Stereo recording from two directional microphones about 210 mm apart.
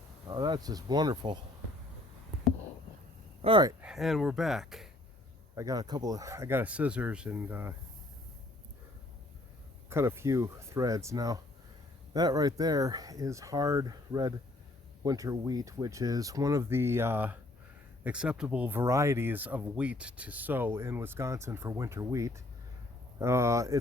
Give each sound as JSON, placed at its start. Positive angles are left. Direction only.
{"t": 0.3, "sound": "speech", "side_deg": -20}
{"t": 3.4, "sound": "speech", "side_deg": -20}
{"t": 3.8, "sound": "speech", "side_deg": -5}
{"t": 5.5, "sound": "speech", "side_deg": -15}
{"t": 9.9, "sound": "speech", "side_deg": -10}